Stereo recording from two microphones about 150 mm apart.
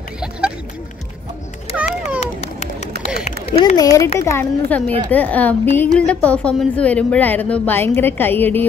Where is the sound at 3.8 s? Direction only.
20° left (ahead or behind).